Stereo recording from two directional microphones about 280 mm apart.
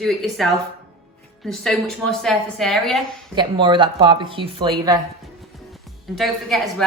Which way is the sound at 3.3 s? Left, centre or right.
Centre.